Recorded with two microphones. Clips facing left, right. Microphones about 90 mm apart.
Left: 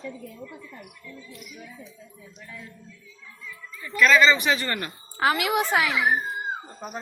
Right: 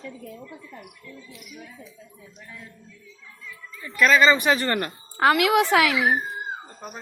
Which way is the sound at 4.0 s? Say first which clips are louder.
Right 1 dB; 45° right (ahead or behind).